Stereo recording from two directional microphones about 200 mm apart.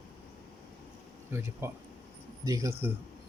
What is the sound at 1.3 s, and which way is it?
Speech, 15° right (ahead or behind).